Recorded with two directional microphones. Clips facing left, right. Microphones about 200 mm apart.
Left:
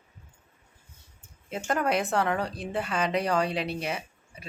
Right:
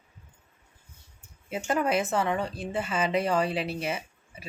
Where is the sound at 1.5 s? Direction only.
5° right (ahead or behind).